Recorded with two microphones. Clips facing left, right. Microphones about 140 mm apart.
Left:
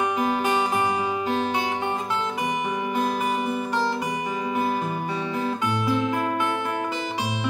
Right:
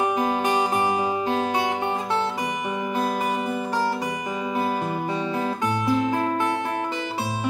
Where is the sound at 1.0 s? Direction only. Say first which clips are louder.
Right 1 dB; 25° right (ahead or behind).